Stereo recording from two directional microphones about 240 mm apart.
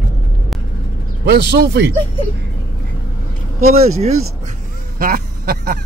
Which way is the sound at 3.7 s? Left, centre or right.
Right.